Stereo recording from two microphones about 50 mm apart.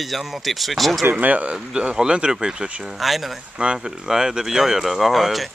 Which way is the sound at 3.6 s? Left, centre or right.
Centre.